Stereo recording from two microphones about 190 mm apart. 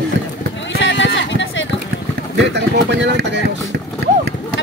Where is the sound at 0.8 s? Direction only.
80° left.